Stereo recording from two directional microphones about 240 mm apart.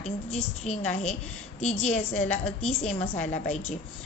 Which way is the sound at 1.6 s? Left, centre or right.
Left.